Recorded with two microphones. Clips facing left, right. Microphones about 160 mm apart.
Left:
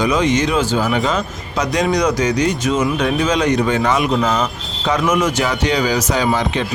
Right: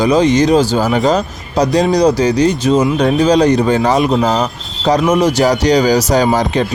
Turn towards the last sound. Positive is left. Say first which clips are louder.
# right 5 dB
turn(degrees=-40)  # may be behind; listen again after turning